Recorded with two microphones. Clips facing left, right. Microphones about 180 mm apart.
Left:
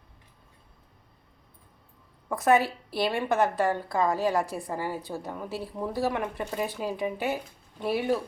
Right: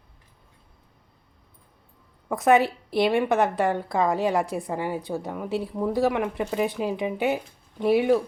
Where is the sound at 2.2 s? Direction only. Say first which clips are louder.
Right 3 dB; 20° right (ahead or behind).